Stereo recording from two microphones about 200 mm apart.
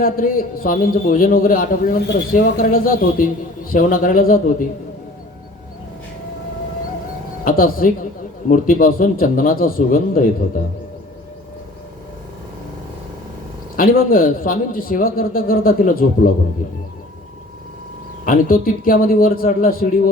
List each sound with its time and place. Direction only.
0.0 s a man's voice: 45° left (ahead or behind)
7.4 s a man's voice: 45° left (ahead or behind)
13.7 s a man's voice: 45° left (ahead or behind)
18.3 s a man's voice: 45° left (ahead or behind)